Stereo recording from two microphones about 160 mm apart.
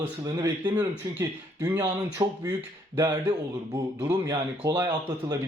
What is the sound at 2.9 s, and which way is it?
Speech, 15° right (ahead or behind).